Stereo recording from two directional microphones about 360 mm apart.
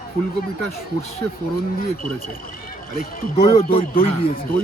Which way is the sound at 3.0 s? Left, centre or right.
Left.